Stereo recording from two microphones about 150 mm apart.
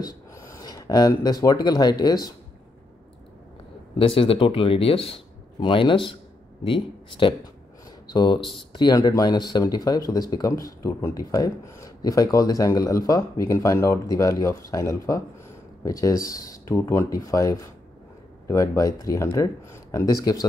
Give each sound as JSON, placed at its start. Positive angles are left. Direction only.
{"t": 0.0, "sound": "speech", "side_deg": 20}
{"t": 4.0, "sound": "speech", "side_deg": 35}
{"t": 8.4, "sound": "speech", "side_deg": 0}
{"t": 8.7, "sound": "speech", "side_deg": 30}